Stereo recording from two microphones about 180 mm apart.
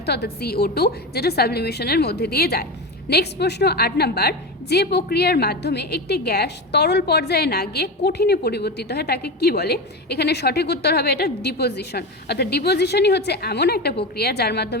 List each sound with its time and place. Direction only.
0.0 s a woman's voice: 65° left (ahead or behind)